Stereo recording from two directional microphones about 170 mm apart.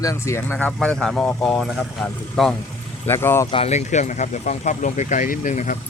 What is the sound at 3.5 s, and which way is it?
Speech, 35° left (ahead or behind).